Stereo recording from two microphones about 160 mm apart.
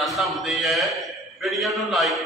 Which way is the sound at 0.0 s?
Centre (ahead or behind).